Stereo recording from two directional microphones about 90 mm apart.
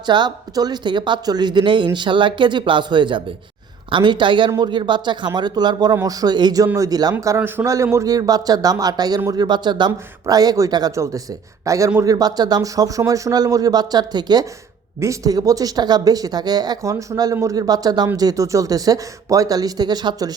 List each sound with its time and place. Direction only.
0.0 s speech: 55° right (ahead or behind)
7.3 s a man's voice: 25° right (ahead or behind)
7.7 s speech: 35° right (ahead or behind)
10.9 s a man's voice: 35° right (ahead or behind); by 14.4 s 50° right (ahead or behind)
15.0 s speech: 40° right (ahead or behind)